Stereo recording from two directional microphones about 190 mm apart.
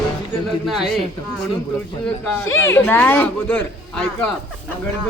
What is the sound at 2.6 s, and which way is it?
A man's voice, 10° left (ahead or behind).